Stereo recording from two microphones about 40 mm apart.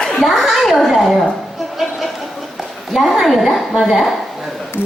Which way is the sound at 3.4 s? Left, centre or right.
Centre.